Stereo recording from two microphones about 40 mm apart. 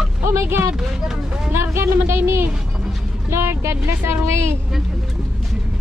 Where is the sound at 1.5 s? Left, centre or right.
Right.